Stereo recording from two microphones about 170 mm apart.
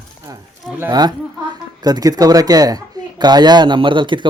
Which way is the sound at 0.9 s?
25° right (ahead or behind).